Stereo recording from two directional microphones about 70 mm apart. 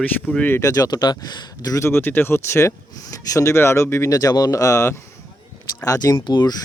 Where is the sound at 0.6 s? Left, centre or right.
Left.